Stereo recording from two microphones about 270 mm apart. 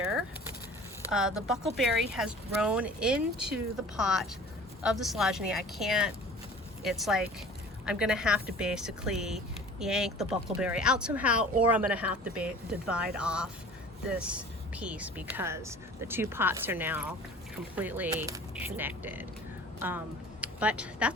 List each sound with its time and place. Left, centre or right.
1.1 s speech: centre
20.4 s speech: centre